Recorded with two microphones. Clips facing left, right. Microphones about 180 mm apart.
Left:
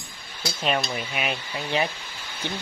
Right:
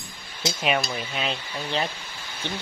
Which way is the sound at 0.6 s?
5° right (ahead or behind).